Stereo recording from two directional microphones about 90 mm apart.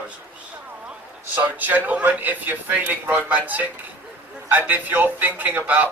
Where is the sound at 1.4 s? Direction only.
20° right (ahead or behind).